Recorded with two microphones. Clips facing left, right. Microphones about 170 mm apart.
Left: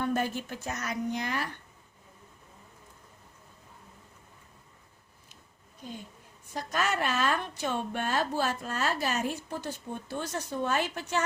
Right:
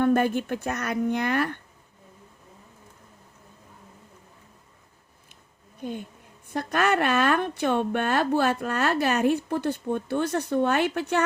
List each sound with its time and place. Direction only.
0.0 s a woman's voice: 55° right (ahead or behind)
5.8 s a woman's voice: 60° right (ahead or behind)